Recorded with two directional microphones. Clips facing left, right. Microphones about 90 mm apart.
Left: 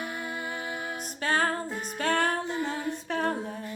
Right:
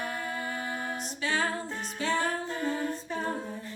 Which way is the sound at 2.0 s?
60° left (ahead or behind).